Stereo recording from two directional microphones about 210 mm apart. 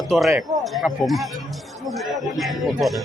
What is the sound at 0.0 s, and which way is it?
A man's voice, centre (ahead or behind).